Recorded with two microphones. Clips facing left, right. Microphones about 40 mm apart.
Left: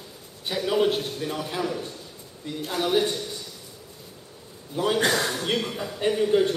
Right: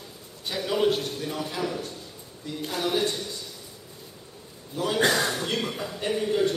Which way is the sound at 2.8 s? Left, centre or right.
Centre.